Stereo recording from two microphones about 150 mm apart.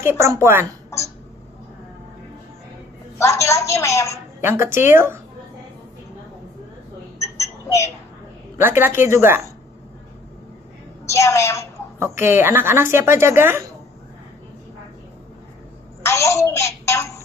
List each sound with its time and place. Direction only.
0.0 s a woman's voice: 15° right (ahead or behind)
3.2 s a sound: 20° left (ahead or behind)
4.4 s a woman's voice: 15° right (ahead or behind)
7.2 s a sound: 20° left (ahead or behind)
8.5 s a woman's voice: 15° right (ahead or behind)
11.1 s a woman's voice: 20° left (ahead or behind)
12.0 s a woman's voice: 15° right (ahead or behind)
16.0 s a child's voice: 20° left (ahead or behind)